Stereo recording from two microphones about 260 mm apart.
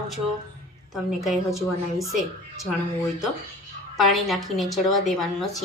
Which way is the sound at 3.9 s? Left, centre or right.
Centre.